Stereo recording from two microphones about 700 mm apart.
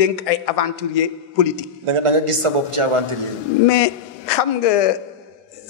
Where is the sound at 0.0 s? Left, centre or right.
Left.